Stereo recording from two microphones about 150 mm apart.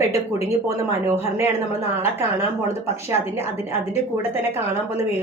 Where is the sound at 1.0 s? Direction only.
15° right (ahead or behind).